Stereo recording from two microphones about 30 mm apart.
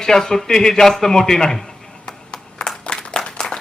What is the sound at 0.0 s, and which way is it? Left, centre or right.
A man's voice, centre.